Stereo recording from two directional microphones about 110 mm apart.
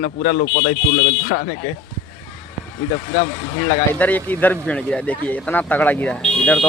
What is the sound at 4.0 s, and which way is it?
Speech, 15° left (ahead or behind).